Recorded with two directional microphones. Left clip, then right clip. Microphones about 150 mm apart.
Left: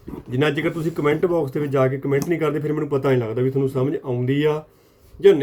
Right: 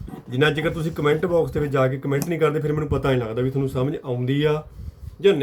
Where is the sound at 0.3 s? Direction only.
20° left (ahead or behind).